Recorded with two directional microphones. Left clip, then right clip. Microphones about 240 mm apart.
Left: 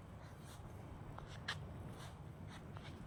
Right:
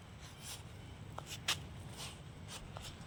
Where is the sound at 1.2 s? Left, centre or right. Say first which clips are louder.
Right 9 dB; right.